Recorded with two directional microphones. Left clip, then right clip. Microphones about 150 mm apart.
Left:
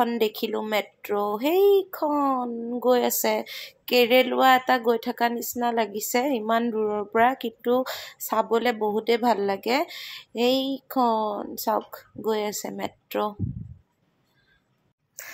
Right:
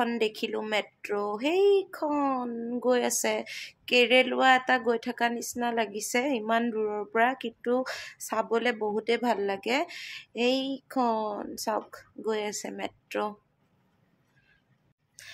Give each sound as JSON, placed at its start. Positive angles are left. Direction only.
{"t": 0.0, "sound": "speech", "side_deg": 25}